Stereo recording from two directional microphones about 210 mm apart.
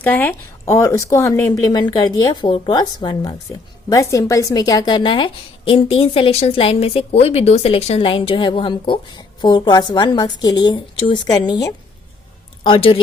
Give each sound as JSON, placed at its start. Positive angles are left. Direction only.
{"t": 0.0, "sound": "a woman's voice", "side_deg": 10}